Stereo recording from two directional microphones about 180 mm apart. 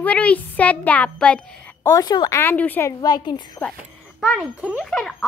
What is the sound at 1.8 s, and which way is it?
Speech, 20° left (ahead or behind).